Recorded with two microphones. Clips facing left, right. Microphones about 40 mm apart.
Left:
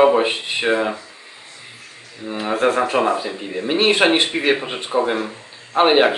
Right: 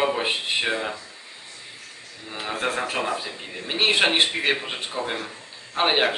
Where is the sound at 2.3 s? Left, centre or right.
Centre.